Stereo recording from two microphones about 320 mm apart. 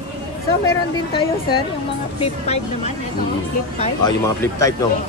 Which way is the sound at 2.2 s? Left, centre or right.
Centre.